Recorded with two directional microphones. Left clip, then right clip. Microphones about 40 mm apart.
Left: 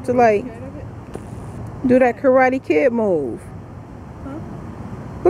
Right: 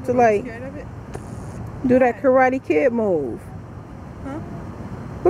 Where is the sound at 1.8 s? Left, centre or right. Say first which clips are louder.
Left 2 dB; centre.